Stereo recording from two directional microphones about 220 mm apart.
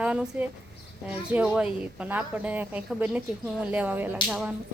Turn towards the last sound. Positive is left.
turn(degrees=-5)  # may be behind; listen again after turning